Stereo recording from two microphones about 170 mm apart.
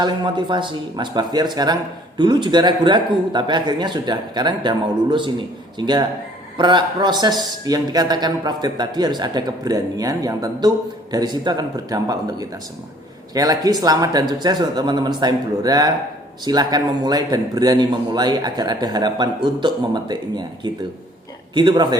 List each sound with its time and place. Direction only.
0.0 s speech: 25° right (ahead or behind)